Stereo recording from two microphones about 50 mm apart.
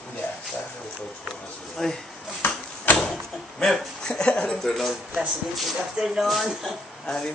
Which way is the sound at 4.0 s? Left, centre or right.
Centre.